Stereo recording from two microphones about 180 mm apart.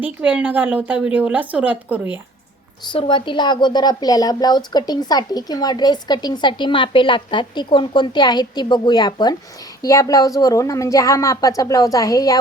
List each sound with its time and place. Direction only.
0.0 s a woman's voice: 5° right (ahead or behind)
2.9 s speech: 25° left (ahead or behind)